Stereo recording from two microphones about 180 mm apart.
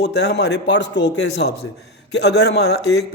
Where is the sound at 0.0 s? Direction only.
70° left (ahead or behind).